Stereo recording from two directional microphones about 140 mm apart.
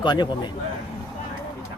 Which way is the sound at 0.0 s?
35° left (ahead or behind).